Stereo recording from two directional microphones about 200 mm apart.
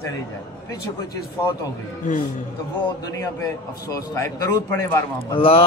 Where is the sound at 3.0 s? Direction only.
15° left (ahead or behind).